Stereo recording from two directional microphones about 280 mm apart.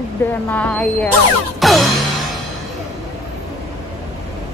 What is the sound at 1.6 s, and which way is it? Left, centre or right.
Music, centre.